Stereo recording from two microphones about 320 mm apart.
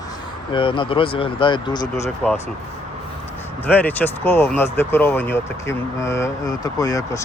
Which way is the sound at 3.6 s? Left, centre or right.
Centre.